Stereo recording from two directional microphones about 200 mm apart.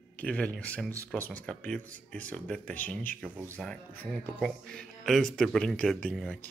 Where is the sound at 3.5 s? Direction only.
5° left (ahead or behind).